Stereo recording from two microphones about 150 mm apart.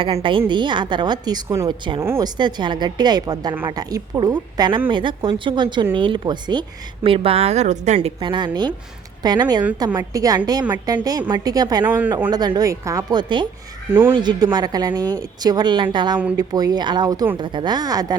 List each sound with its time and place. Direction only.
0.0 s speech: 35° right (ahead or behind)
7.9 s speech: 35° right (ahead or behind)
11.9 s speech: 10° right (ahead or behind)
12.3 s speech: 25° right (ahead or behind)